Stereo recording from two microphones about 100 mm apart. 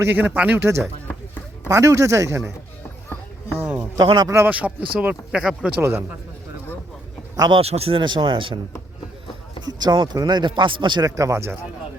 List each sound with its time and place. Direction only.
0.0 s a man's voice: 20° right (ahead or behind)
3.6 s a sound: 20° right (ahead or behind)
3.9 s a man's voice: 50° right (ahead or behind)
4.3 s a man's voice: 25° right (ahead or behind)
4.5 s speech: 15° right (ahead or behind)
5.8 s a man's voice: 25° right (ahead or behind)
7.5 s a man's voice: 90° right
8.0 s speech: 50° right (ahead or behind)
9.6 s a man's voice: 45° right (ahead or behind)
11.0 s a man's voice: 35° right (ahead or behind)